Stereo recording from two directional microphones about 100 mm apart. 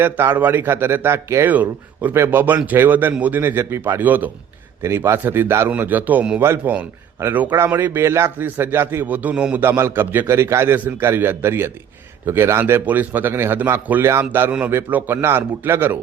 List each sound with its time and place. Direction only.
0.0 s a man's voice: 20° right (ahead or behind)
6.4 s a man's voice: 25° right (ahead or behind)